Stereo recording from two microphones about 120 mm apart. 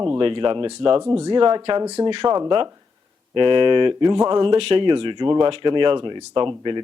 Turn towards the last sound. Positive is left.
turn(degrees=-40)  # may be behind; listen again after turning